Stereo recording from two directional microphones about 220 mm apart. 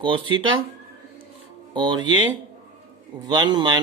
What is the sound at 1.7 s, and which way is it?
Speech, 20° right (ahead or behind).